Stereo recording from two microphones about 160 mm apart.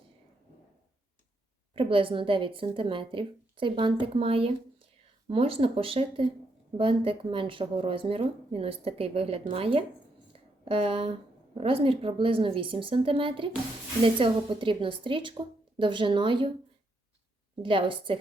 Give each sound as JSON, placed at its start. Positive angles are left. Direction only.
{"t": 1.7, "sound": "a woman's voice", "side_deg": -35}
{"t": 17.6, "sound": "speech", "side_deg": -35}